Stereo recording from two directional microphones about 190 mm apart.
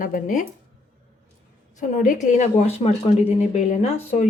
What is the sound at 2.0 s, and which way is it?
A woman's voice, 40° left (ahead or behind).